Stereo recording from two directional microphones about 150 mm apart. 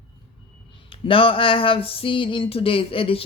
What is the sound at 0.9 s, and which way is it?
Speech, 35° left (ahead or behind).